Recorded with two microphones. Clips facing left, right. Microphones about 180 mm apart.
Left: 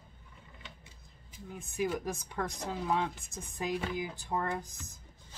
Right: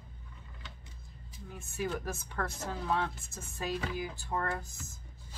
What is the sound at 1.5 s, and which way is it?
Speech, 15° left (ahead or behind).